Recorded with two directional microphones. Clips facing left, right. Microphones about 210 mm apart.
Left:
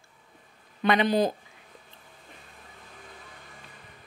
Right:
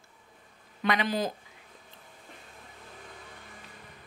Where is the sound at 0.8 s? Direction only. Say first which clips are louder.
Left 5 dB; 25° left (ahead or behind).